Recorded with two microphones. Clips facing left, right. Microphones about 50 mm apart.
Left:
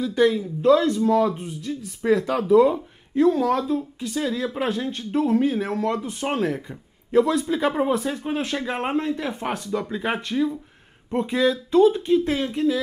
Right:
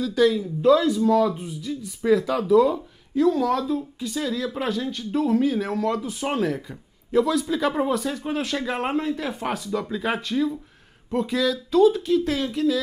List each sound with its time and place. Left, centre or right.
0.0 s speech: left
1.4 s speech: left
9.3 s speech: left
9.7 s speech: left